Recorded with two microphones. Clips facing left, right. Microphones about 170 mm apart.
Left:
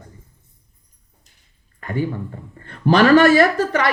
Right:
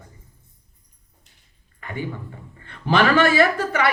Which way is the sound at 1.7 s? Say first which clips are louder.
Left 7 dB; 45° left (ahead or behind).